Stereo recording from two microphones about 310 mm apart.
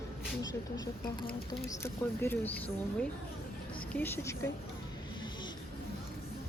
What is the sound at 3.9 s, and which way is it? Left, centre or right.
Speech, centre.